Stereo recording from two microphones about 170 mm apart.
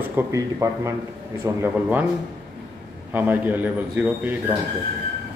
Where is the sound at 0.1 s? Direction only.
15° right (ahead or behind).